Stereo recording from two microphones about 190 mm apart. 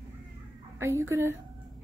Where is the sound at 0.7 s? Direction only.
15° right (ahead or behind).